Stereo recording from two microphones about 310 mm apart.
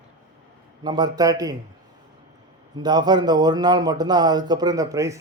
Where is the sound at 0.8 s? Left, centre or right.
Centre.